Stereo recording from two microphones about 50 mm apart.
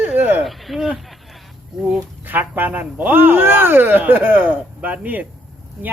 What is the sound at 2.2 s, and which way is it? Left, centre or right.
Speech, right.